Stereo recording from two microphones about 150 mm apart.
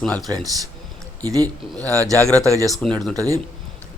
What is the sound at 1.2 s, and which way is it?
A man's voice, 20° right (ahead or behind).